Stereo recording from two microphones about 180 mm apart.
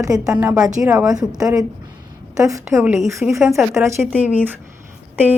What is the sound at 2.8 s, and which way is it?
Speech, 5° right (ahead or behind).